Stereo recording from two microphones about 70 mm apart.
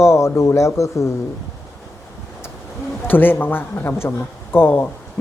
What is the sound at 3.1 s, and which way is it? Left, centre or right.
A woman's voice, left.